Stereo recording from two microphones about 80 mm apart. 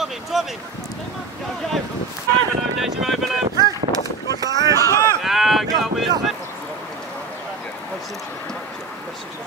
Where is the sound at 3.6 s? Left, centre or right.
Right.